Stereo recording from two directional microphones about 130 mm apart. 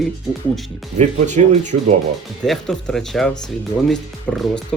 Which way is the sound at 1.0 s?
65° right (ahead or behind).